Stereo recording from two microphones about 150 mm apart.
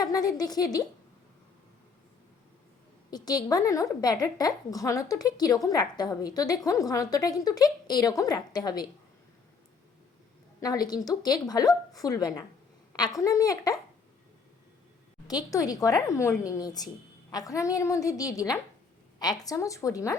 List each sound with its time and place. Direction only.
0.0 s a woman's voice: 25° left (ahead or behind)
3.1 s a woman's voice: 25° left (ahead or behind)
10.6 s a woman's voice: 25° left (ahead or behind)
15.3 s a woman's voice: 25° left (ahead or behind)